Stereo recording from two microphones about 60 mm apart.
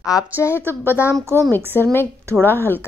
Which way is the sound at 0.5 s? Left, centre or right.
Right.